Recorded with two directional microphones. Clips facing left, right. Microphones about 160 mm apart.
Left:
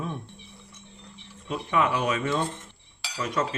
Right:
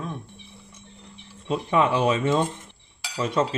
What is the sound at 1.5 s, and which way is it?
Speech, 30° right (ahead or behind).